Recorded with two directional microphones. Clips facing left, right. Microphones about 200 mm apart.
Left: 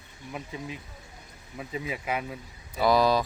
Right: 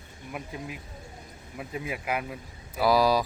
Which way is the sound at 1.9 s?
5° right (ahead or behind).